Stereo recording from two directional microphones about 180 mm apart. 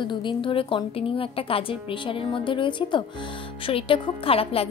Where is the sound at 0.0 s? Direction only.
25° left (ahead or behind).